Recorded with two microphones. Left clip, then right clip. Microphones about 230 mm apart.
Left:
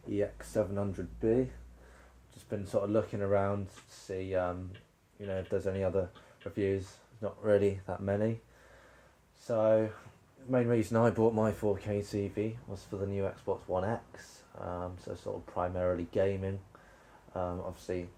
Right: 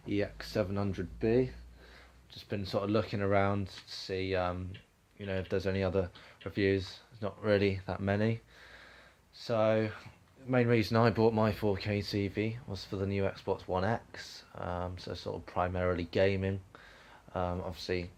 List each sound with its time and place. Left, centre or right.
0.1 s speech: right
2.5 s speech: right
9.5 s speech: right